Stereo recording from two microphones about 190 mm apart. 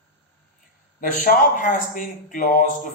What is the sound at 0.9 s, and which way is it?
Speech, 45° left (ahead or behind).